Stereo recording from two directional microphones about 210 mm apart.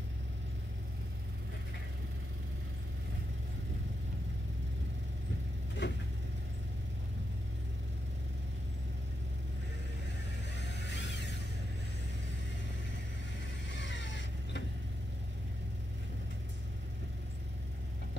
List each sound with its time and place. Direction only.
5.8 s vehicle: 55° left (ahead or behind)
10.5 s a sound: 55° left (ahead or behind)
13.7 s vehicle: 60° left (ahead or behind)